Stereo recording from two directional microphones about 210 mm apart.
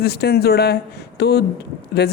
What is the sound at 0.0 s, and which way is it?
Speech, 50° left (ahead or behind).